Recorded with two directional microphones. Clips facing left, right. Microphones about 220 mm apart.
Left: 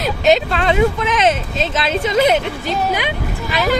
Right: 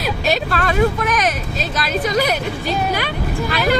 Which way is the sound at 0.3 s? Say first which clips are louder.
Left 6 dB; 20° left (ahead or behind).